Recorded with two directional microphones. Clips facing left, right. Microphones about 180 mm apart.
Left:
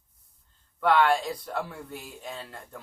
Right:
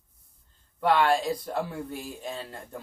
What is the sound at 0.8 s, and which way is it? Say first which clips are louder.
Speech: even; 35° right (ahead or behind).